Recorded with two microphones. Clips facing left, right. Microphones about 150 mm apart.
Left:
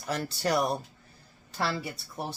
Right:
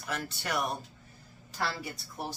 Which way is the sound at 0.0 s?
35° left (ahead or behind).